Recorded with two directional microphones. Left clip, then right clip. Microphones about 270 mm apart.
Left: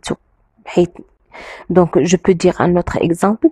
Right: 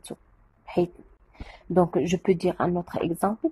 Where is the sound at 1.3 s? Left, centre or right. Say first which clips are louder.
Left 10 dB; left.